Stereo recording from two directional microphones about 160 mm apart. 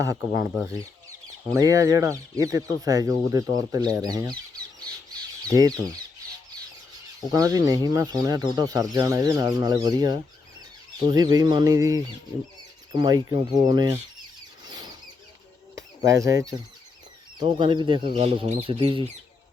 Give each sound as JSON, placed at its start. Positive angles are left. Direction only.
{"t": 0.3, "sound": "speech", "side_deg": -10}
{"t": 5.5, "sound": "speech", "side_deg": -20}
{"t": 7.2, "sound": "speech", "side_deg": -20}
{"t": 14.6, "sound": "squeal", "side_deg": -25}
{"t": 16.0, "sound": "speech", "side_deg": -20}
{"t": 18.2, "sound": "speech", "side_deg": -40}
{"t": 18.6, "sound": "speech", "side_deg": -30}